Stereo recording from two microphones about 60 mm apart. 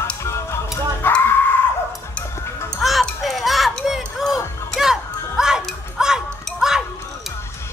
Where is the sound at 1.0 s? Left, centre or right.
Left.